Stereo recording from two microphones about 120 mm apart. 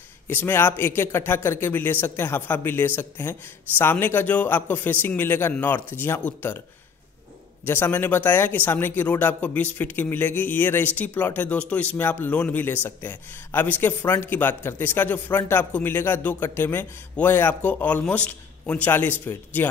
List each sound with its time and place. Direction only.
0.3 s speech: 20° left (ahead or behind)
7.6 s speech: 20° left (ahead or behind)